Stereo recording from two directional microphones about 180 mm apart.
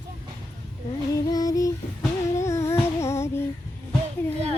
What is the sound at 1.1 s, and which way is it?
Music, 20° left (ahead or behind).